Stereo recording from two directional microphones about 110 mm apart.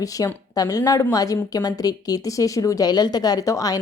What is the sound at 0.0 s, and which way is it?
A woman's voice, 30° left (ahead or behind).